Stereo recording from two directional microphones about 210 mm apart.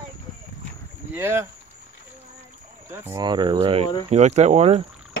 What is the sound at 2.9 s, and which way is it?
Speech, 15° right (ahead or behind).